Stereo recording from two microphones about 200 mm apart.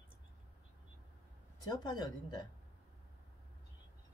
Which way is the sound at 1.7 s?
20° left (ahead or behind).